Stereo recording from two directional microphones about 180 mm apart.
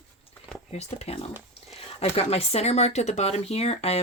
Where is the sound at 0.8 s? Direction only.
35° left (ahead or behind).